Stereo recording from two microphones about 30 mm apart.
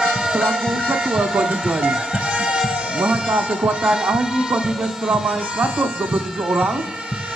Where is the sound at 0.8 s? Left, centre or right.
Right.